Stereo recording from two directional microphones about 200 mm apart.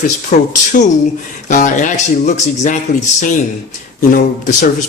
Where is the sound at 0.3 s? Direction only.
40° left (ahead or behind).